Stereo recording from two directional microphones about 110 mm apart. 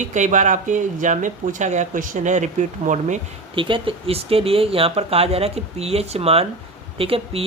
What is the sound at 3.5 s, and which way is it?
Speech, 50° right (ahead or behind).